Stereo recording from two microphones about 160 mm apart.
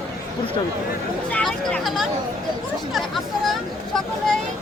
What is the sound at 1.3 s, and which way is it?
Speech, 5° left (ahead or behind).